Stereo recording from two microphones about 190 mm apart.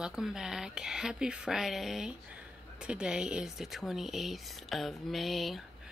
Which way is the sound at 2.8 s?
5° right (ahead or behind).